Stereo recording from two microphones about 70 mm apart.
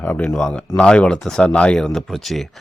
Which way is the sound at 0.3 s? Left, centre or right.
Centre.